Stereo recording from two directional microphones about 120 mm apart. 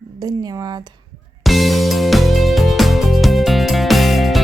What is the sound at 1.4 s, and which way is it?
Music, centre (ahead or behind).